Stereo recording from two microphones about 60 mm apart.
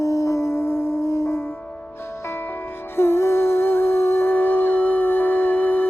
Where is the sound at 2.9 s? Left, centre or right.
Left.